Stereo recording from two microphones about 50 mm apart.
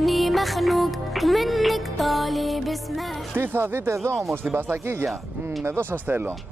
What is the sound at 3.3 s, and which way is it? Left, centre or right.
Speech, right.